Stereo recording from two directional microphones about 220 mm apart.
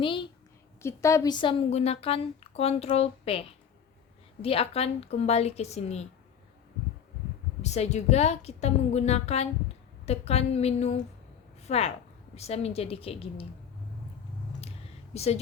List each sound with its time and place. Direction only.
0.0 s a woman's voice: 25° left (ahead or behind)
4.4 s a woman's voice: 25° left (ahead or behind)
7.6 s a woman's voice: 30° left (ahead or behind)
15.1 s speech: 30° left (ahead or behind)